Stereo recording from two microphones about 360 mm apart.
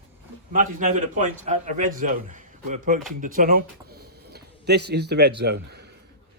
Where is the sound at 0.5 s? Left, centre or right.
Right.